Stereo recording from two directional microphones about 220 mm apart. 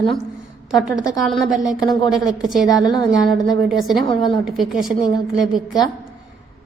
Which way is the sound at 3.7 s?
Centre (ahead or behind).